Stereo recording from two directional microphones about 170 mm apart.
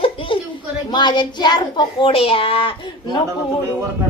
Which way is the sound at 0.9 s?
25° left (ahead or behind).